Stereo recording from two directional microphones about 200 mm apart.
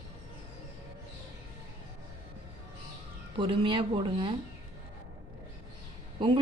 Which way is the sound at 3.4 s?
25° right (ahead or behind).